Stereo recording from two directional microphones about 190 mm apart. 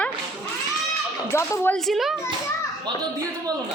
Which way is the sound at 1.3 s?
15° left (ahead or behind).